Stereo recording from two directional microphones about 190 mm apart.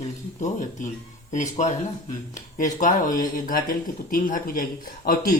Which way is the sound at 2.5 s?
40° left (ahead or behind).